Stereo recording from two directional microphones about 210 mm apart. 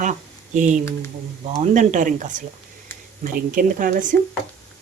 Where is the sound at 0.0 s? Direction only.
35° right (ahead or behind).